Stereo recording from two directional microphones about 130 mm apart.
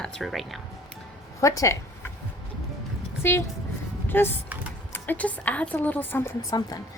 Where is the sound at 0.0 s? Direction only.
Centre (ahead or behind).